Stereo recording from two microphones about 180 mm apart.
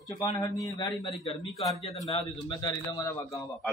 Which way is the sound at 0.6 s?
20° left (ahead or behind).